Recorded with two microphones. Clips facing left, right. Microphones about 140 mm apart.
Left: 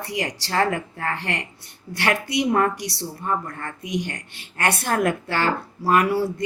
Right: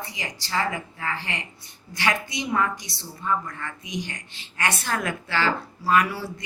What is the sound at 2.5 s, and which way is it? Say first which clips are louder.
Speech: left 4 dB; 50° left (ahead or behind).